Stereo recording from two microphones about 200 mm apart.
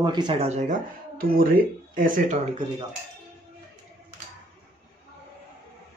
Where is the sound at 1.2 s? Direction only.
45° right (ahead or behind).